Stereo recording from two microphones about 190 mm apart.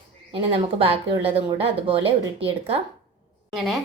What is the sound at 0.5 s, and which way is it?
Speech, 30° right (ahead or behind).